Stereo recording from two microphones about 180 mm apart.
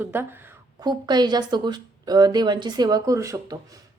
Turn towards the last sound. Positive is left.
turn(degrees=-20)  # may be behind; listen again after turning